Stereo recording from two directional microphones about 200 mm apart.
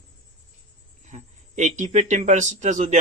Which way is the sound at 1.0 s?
35° right (ahead or behind).